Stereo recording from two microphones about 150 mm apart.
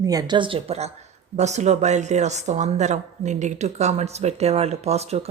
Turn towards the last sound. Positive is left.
turn(degrees=-45)  # may be behind; listen again after turning